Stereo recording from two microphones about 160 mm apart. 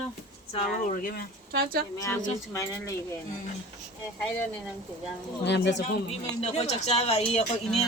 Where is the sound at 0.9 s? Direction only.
60° left (ahead or behind).